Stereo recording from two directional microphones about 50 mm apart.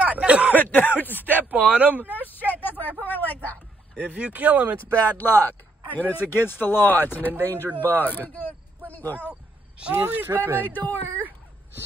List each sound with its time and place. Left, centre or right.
0.0 s a sound: right
0.6 s speech: left
1.5 s speech: right
2.2 s a sound: left
2.8 s speech: left
4.1 s speech: right
4.7 s speech: left
9.3 s a sound: right
10.0 s speech: right
10.7 s speech: left